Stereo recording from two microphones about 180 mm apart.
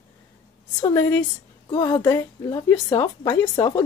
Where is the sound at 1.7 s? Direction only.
25° left (ahead or behind).